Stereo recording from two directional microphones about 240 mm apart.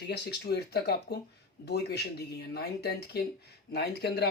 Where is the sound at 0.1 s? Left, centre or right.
Left.